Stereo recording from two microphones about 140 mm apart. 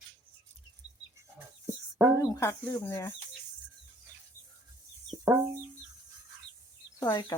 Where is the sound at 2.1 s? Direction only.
25° left (ahead or behind).